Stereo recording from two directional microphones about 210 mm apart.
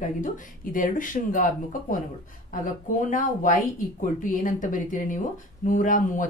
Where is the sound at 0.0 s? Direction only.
40° left (ahead or behind).